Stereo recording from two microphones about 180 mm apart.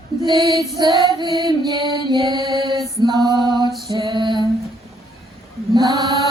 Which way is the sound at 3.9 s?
25° right (ahead or behind).